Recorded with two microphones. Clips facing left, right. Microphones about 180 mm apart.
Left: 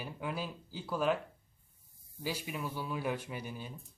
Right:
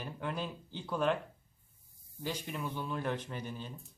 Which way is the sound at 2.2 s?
5° left (ahead or behind).